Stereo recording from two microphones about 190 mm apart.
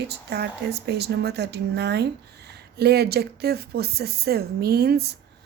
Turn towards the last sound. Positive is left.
turn(degrees=-60)  # may be behind; listen again after turning